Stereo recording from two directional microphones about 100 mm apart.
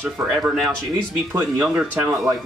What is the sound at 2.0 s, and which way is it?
Speech, 30° right (ahead or behind).